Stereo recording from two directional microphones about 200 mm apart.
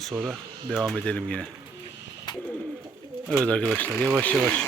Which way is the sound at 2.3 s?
20° left (ahead or behind).